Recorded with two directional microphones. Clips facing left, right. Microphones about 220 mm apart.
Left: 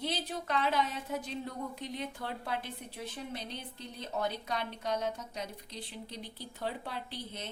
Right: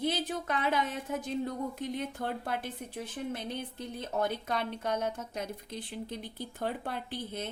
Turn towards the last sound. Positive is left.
turn(degrees=-50)  # may be behind; listen again after turning